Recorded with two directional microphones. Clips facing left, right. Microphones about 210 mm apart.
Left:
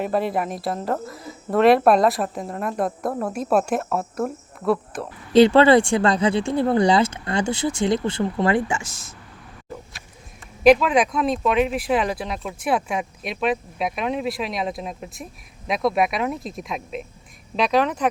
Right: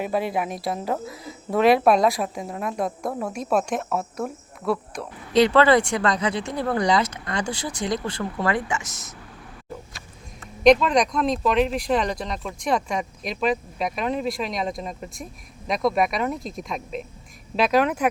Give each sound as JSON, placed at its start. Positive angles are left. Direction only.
{"t": 0.0, "sound": "speech", "side_deg": 0}
{"t": 5.3, "sound": "speech", "side_deg": 30}
{"t": 10.6, "sound": "speech", "side_deg": 5}